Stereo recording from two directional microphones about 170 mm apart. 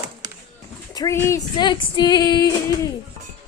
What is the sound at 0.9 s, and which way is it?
Speech, 20° left (ahead or behind).